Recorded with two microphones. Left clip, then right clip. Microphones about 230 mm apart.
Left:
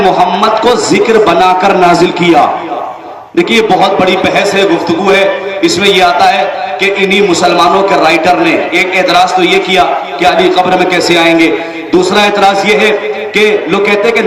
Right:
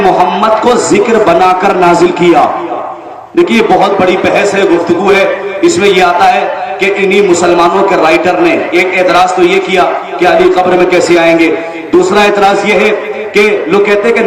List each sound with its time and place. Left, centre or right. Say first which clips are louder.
0.0 s a man's voice: even; left